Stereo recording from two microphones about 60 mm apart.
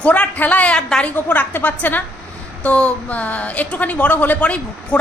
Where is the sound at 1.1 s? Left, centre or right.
Left.